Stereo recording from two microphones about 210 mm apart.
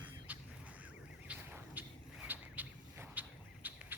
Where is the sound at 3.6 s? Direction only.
10° right (ahead or behind).